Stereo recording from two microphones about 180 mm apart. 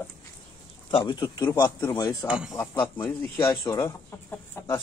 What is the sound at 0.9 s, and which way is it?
A man's voice, 25° left (ahead or behind).